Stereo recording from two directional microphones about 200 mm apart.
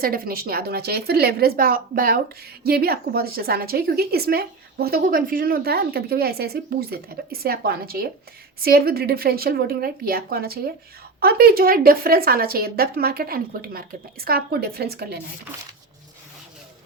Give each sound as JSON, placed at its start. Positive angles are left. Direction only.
{"t": 0.0, "sound": "a woman's voice", "side_deg": -50}